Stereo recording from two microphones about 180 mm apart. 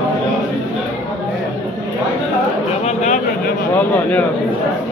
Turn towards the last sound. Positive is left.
turn(degrees=10)  # may be behind; listen again after turning